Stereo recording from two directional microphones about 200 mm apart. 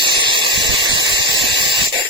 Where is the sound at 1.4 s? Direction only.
55° right (ahead or behind).